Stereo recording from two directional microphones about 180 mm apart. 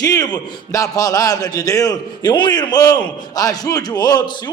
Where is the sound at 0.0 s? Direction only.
20° left (ahead or behind).